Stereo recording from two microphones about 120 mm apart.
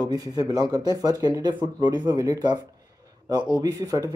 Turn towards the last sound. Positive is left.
turn(degrees=-30)  # may be behind; listen again after turning